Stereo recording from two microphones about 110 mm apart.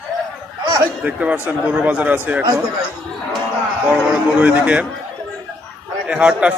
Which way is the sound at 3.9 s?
10° right (ahead or behind).